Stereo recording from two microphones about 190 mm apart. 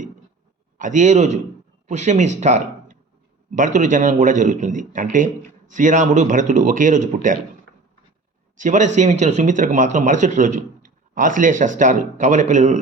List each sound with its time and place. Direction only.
0.8 s speech: 40° right (ahead or behind)
8.5 s speech: 40° right (ahead or behind)